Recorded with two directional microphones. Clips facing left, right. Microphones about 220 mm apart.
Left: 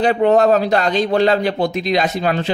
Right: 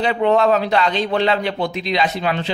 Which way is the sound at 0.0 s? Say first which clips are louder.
Left 3 dB; 45° left (ahead or behind).